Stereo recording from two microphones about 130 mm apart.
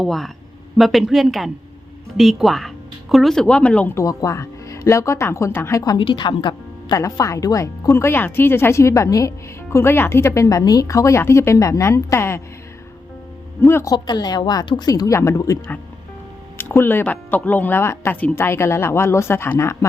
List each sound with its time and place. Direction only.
0.0 s speech: centre (ahead or behind)
4.0 s speech: 25° left (ahead or behind)
13.6 s speech: 20° left (ahead or behind)
13.9 s a woman's voice: 35° left (ahead or behind)
16.6 s speech: 15° left (ahead or behind)